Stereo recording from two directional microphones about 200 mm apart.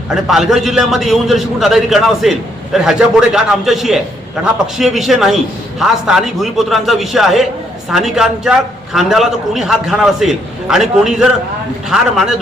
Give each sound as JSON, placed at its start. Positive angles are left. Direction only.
{"t": 0.1, "sound": "a man's voice", "side_deg": 0}